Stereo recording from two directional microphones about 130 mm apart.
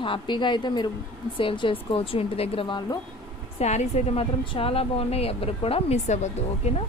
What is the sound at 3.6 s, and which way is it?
A woman's voice, 60° left (ahead or behind).